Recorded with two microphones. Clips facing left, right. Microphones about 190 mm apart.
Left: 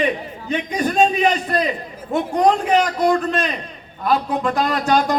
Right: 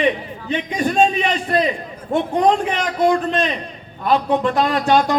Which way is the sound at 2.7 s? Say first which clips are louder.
Left 1 dB; 40° left (ahead or behind).